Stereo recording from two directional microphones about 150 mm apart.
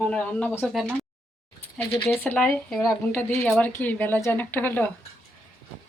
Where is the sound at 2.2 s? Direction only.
10° left (ahead or behind).